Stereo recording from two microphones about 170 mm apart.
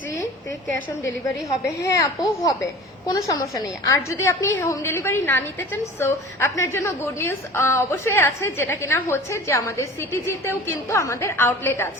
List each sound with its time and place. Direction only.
1.5 s a woman's voice: 20° left (ahead or behind)